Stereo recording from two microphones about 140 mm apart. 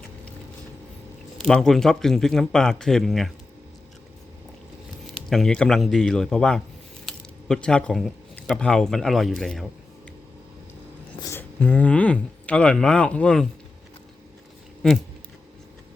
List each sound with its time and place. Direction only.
1.4 s speech: 5° left (ahead or behind)
5.3 s speech: 5° left (ahead or behind)
11.2 s speech: 15° left (ahead or behind)